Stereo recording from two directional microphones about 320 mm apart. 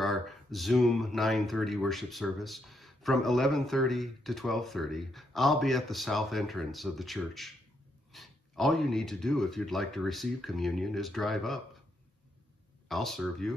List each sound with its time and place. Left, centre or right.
0.0 s speech: centre
12.8 s speech: centre